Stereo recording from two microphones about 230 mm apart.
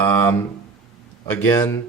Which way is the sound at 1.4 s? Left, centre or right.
Centre.